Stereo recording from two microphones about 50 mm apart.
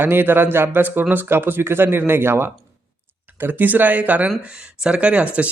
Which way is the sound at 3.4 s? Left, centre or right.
Right.